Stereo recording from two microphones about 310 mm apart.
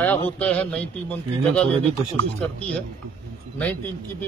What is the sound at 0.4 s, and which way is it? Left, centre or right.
A man's voice, centre.